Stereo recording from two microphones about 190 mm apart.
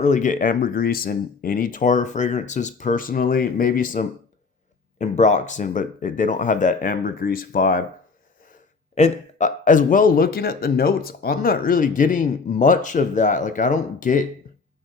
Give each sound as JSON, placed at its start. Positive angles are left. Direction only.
{"t": 0.0, "sound": "speech", "side_deg": 40}
{"t": 9.0, "sound": "speech", "side_deg": 40}